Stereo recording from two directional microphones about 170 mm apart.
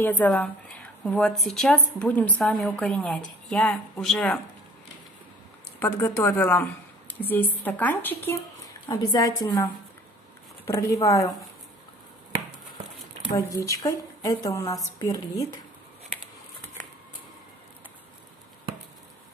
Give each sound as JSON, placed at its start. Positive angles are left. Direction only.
{"t": 0.0, "sound": "a woman's voice", "side_deg": 10}
{"t": 5.9, "sound": "a woman's voice", "side_deg": 15}
{"t": 8.8, "sound": "a woman's voice", "side_deg": 20}
{"t": 13.4, "sound": "a woman's voice", "side_deg": 15}